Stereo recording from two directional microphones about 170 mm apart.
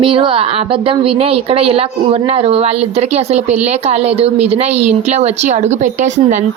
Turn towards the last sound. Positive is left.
turn(degrees=-45)  # may be behind; listen again after turning